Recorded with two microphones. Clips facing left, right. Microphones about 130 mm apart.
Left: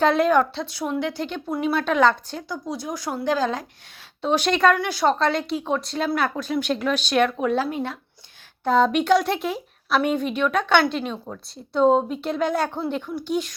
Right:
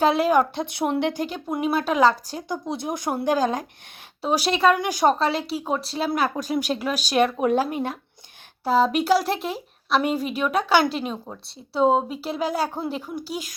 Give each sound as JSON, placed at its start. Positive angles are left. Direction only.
{"t": 0.0, "sound": "speech", "side_deg": -5}
{"t": 0.5, "sound": "speech", "side_deg": -50}
{"t": 1.2, "sound": "a woman's voice", "side_deg": -15}
{"t": 2.3, "sound": "a woman's voice", "side_deg": -20}